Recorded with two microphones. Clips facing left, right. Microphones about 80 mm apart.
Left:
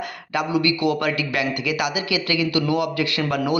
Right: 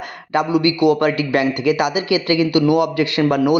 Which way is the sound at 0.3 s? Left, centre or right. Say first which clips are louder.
Right 5 dB; right.